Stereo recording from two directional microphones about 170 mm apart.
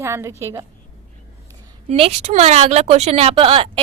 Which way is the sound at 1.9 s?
40° right (ahead or behind).